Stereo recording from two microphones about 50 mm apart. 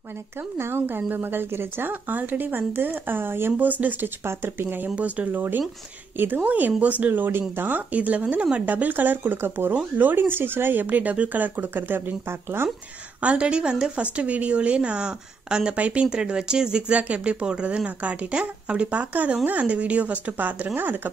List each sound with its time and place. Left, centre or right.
0.4 s speech: right
3.5 s speech: right
4.2 s speech: right
4.8 s speech: right
5.3 s speech: right
6.4 s speech: right
12.3 s speech: right
13.2 s speech: right